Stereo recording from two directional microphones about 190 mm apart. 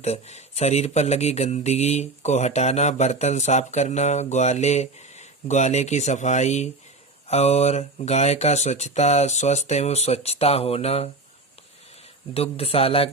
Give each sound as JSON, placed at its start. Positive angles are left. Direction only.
{"t": 0.0, "sound": "speech", "side_deg": 35}
{"t": 12.3, "sound": "speech", "side_deg": 30}